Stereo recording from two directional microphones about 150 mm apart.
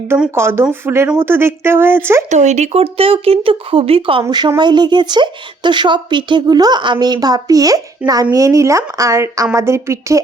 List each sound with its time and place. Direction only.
0.3 s speech: 15° right (ahead or behind)
2.3 s speech: 50° right (ahead or behind); by 10.2 s 20° right (ahead or behind)